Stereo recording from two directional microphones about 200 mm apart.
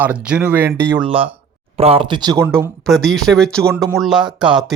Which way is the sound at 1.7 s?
30° right (ahead or behind).